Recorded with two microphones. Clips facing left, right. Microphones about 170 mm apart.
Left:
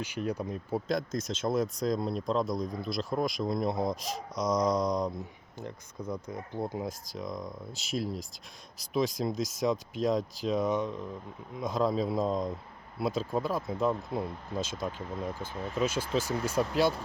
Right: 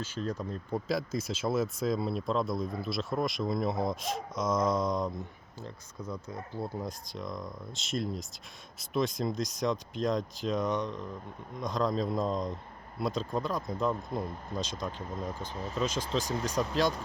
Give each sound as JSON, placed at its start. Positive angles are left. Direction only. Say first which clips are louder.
{"t": 0.0, "sound": "speech", "louder": "left 2 dB", "side_deg": 15}
{"t": 0.9, "sound": "speech", "louder": "right 1 dB", "side_deg": -5}
{"t": 6.0, "sound": "speech", "louder": "left 3 dB", "side_deg": 30}
{"t": 6.3, "sound": "speech", "louder": "left 1 dB", "side_deg": 20}
{"t": 6.8, "sound": "speech", "louder": "left 2 dB", "side_deg": 0}